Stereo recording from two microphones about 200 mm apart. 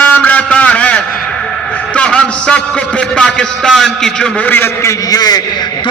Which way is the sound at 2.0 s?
5° left (ahead or behind).